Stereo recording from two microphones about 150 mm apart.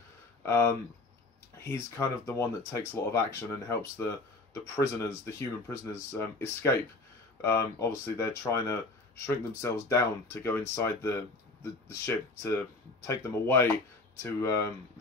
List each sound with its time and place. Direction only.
0.5 s speech: 15° left (ahead or behind)